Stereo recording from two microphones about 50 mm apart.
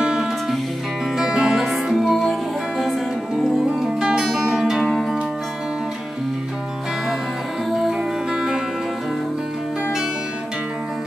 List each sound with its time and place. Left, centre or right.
0.0 s music: centre
8.3 s music: centre